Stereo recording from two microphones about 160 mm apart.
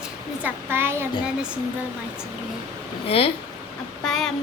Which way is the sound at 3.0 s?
35° left (ahead or behind).